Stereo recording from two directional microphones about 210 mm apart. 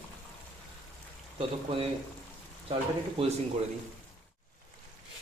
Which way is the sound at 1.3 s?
25° right (ahead or behind).